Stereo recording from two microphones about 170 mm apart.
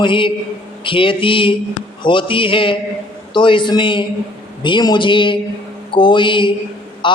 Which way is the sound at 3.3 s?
30° left (ahead or behind).